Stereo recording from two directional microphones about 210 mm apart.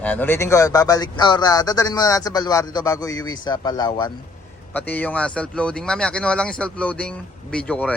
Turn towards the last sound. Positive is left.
turn(degrees=5)  # may be behind; listen again after turning